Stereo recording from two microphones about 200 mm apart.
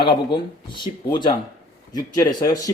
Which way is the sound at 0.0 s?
25° left (ahead or behind).